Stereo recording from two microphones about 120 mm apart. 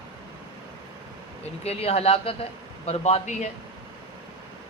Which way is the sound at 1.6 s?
60° left (ahead or behind).